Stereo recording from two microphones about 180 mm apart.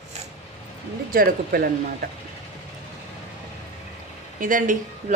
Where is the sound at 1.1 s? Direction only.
50° right (ahead or behind).